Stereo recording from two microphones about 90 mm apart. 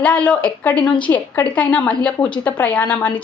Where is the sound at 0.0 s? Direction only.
15° left (ahead or behind).